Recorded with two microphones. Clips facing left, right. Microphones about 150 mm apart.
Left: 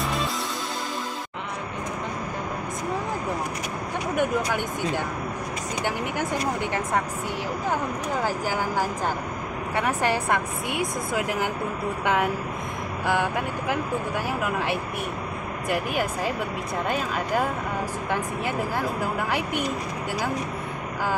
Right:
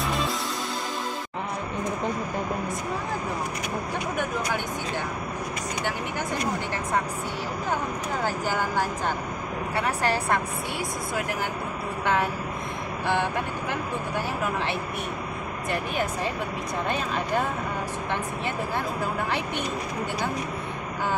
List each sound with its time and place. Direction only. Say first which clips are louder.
0.0 s music: even; centre (ahead or behind)
8.3 s speech: left 1 dB; 10° left (ahead or behind)
15.7 s speech: left 2 dB; 10° left (ahead or behind)